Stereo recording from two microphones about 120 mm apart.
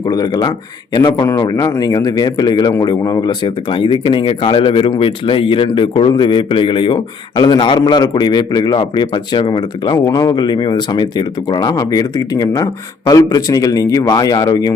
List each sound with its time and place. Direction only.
0.0 s speech: 35° left (ahead or behind)